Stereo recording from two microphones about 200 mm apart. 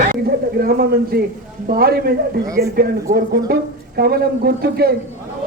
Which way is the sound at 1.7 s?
50° right (ahead or behind).